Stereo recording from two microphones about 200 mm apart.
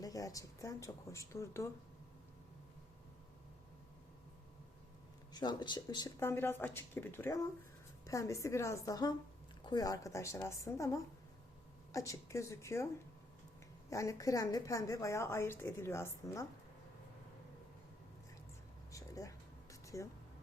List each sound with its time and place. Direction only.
0.0 s a woman's voice: 15° left (ahead or behind)
5.3 s a woman's voice: 20° left (ahead or behind)
13.9 s a woman's voice: 15° left (ahead or behind)
18.9 s a sound: 15° left (ahead or behind)